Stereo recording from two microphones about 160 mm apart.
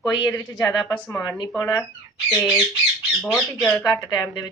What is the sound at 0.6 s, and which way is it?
Speech, 25° left (ahead or behind).